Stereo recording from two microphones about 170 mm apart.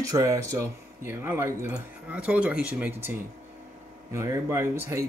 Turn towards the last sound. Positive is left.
turn(degrees=-15)  # may be behind; listen again after turning